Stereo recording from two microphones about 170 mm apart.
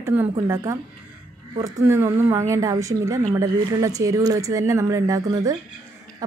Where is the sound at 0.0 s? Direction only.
15° right (ahead or behind).